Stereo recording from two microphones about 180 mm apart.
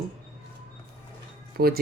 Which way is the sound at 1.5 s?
55° right (ahead or behind).